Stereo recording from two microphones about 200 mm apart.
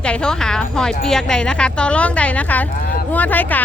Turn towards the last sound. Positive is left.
turn(degrees=10)  # may be behind; listen again after turning